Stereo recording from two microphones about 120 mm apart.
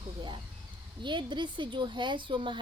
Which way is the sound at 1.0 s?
40° right (ahead or behind).